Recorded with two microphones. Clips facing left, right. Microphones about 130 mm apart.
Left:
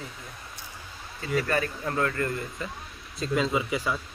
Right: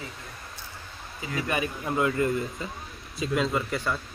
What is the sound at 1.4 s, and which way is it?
A man's voice, 10° right (ahead or behind).